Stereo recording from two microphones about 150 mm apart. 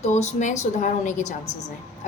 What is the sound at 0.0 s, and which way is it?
A woman's voice, 50° left (ahead or behind).